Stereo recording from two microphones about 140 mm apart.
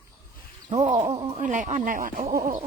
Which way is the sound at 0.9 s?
45° right (ahead or behind).